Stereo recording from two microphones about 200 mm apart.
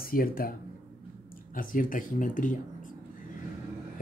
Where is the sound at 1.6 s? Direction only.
45° left (ahead or behind).